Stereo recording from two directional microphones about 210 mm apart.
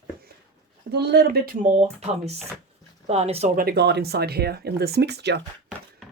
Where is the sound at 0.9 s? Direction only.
50° right (ahead or behind).